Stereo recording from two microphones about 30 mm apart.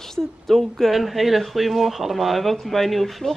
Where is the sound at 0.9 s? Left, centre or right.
Centre.